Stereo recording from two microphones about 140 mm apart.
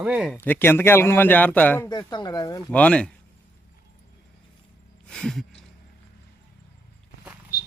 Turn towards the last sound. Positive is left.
turn(degrees=90)